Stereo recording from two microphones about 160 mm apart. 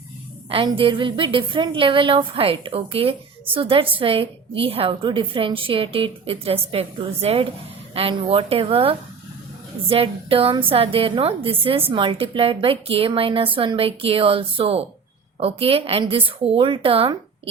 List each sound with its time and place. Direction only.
0.5 s a woman's voice: 35° right (ahead or behind)